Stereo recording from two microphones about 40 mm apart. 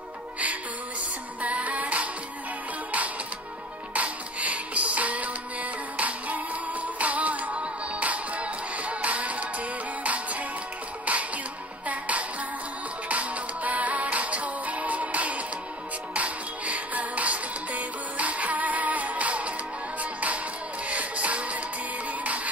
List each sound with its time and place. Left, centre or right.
1.4 s music: right
3.9 s music: right